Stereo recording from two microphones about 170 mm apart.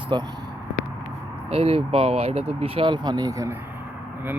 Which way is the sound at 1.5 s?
35° right (ahead or behind).